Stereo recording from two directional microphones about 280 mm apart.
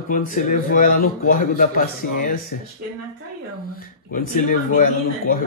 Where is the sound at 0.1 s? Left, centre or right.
Left.